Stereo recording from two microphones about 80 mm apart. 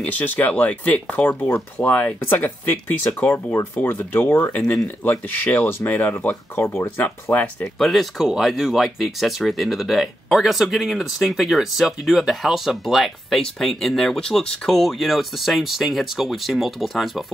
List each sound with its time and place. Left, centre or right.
0.0 s speech: left
7.6 s speech: centre